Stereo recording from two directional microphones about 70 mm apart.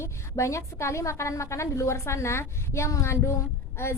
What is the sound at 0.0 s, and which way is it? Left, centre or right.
A woman's voice, left.